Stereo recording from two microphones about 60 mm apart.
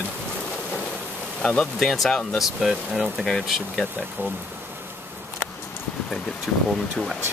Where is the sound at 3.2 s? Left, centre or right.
Centre.